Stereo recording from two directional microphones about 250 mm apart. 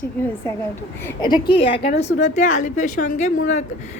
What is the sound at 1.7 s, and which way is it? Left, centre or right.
A woman's voice, left.